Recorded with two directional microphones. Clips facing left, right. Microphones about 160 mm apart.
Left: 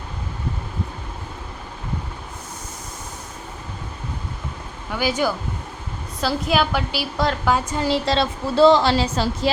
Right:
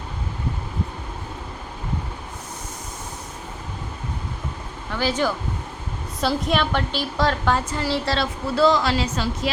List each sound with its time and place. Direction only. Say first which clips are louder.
4.9 s a woman's voice: left 1 dB; 10° left (ahead or behind); by 9.5 s 35° left (ahead or behind)